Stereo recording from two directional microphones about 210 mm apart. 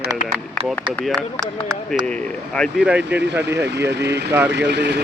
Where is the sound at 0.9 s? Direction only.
Centre (ahead or behind).